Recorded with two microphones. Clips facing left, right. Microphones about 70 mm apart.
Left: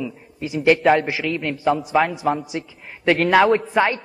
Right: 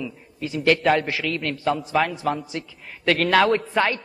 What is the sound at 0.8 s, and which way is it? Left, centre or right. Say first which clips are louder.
A man's voice: left 3 dB; centre.